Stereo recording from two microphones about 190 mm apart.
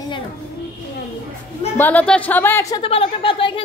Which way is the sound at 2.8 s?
30° left (ahead or behind).